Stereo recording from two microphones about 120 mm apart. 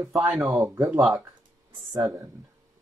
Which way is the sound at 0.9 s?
5° right (ahead or behind).